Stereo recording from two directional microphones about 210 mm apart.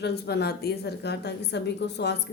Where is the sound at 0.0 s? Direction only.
50° left (ahead or behind).